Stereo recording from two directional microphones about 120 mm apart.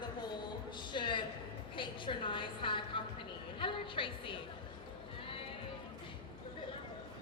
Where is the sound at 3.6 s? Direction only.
45° left (ahead or behind).